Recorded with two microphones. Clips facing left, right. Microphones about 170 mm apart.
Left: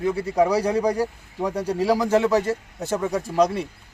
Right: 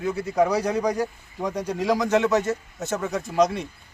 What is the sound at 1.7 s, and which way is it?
A man's voice, 35° left (ahead or behind).